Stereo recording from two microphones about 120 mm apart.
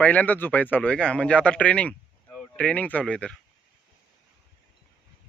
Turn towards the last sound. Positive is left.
turn(degrees=10)  # may be behind; listen again after turning